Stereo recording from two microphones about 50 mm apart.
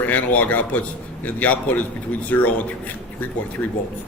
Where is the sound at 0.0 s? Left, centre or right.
Left.